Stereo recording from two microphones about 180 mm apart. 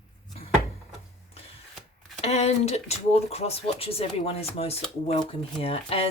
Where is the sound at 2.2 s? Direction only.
35° left (ahead or behind).